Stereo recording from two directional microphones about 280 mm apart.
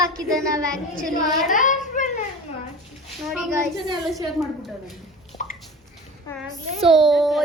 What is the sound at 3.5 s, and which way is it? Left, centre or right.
Child singing, centre.